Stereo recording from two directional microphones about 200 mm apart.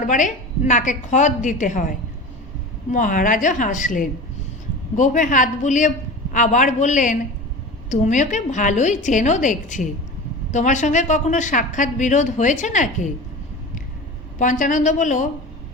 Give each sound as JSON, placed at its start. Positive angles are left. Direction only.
{"t": 0.0, "sound": "a woman's voice", "side_deg": 40}
{"t": 14.3, "sound": "a woman's voice", "side_deg": 40}